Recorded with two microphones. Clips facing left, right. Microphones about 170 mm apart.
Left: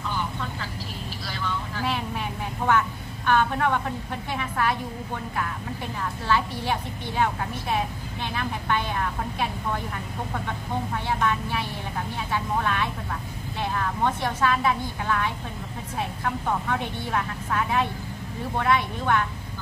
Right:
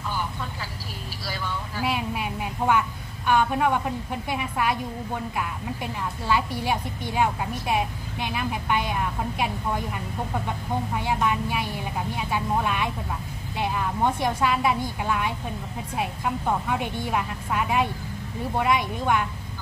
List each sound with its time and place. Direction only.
1.2 s vehicle: 10° right (ahead or behind)
3.3 s a woman's voice: 10° right (ahead or behind)
6.2 s a woman's voice: 10° right (ahead or behind)
11.1 s a woman's voice: 10° right (ahead or behind)